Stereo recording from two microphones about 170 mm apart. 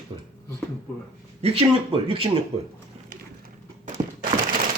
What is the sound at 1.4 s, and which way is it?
Speech, 35° right (ahead or behind).